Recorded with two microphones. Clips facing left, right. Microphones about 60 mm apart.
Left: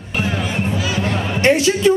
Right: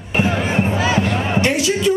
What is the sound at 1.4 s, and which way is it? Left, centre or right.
Speech, left.